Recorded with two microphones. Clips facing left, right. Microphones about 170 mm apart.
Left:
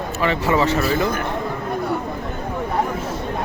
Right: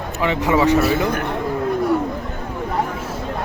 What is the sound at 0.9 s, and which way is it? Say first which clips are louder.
Speech: right 1 dB; 70° right (ahead or behind).